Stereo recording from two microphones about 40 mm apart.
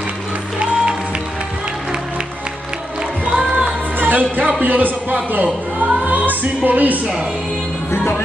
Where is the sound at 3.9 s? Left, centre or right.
Right.